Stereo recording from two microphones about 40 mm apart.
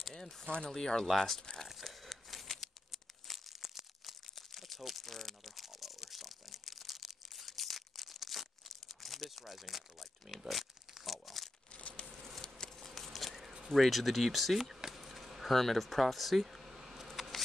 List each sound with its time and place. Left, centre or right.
0.1 s speech: centre
1.0 s speech: centre
1.9 s crumpling: centre
10.5 s pig: centre
11.7 s a sound: left
12.4 s bee: centre
12.7 s a sound: centre